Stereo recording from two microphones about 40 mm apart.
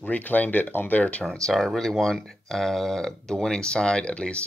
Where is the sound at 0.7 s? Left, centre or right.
Left.